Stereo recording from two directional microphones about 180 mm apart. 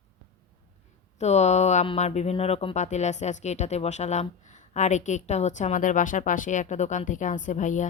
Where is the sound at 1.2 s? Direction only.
40° left (ahead or behind).